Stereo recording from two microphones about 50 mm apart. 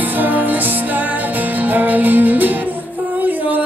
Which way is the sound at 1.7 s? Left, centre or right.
Right.